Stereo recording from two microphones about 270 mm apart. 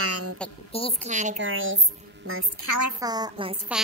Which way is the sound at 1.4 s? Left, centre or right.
Right.